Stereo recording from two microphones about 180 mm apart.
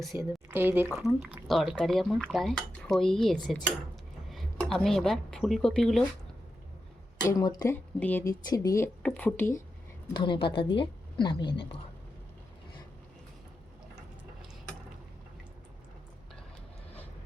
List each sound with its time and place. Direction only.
0.2 s speech: 15° right (ahead or behind); by 6.1 s 5° left (ahead or behind)
7.2 s a woman's voice: 20° left (ahead or behind)
7.9 s speech: 10° left (ahead or behind)
10.1 s a woman's voice: 25° left (ahead or behind)